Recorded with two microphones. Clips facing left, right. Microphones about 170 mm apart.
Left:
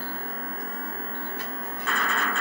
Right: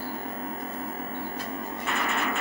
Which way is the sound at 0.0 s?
15° right (ahead or behind).